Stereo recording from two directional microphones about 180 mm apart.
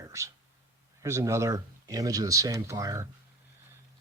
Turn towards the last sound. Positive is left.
turn(degrees=-15)  # may be behind; listen again after turning